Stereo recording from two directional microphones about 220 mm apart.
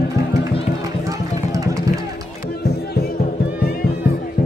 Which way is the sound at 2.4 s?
45° left (ahead or behind).